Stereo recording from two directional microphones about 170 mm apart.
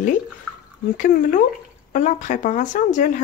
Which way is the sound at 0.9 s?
50° left (ahead or behind).